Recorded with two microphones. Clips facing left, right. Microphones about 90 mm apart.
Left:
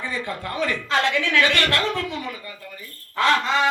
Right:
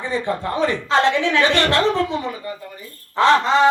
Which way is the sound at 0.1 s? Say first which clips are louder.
Right 6 dB; 30° right (ahead or behind).